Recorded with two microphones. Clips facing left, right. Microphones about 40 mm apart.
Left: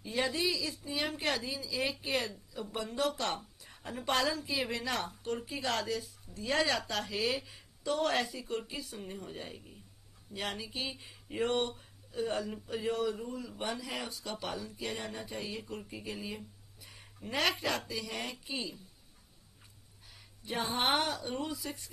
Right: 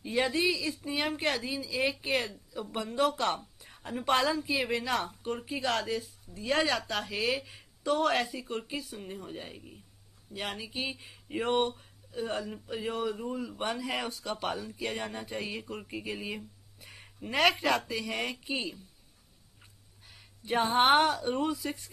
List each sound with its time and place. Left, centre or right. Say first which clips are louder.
0.0 s a woman's voice: right 4 dB; centre
4.8 s a woman's voice: right 4 dB; centre
5.2 s speech: right 3 dB; centre
5.9 s speech: right 3 dB; right
6.4 s speech: right 2 dB; centre
8.8 s a woman's voice: right 2 dB; centre
11.7 s speech: right 1 dB; centre
13.7 s speech: right 5 dB; right
14.2 s speech: right 5 dB; right
16.3 s a sound: right 3 dB; right
17.8 s speech: right 5 dB; right
20.4 s speech: right 8 dB; right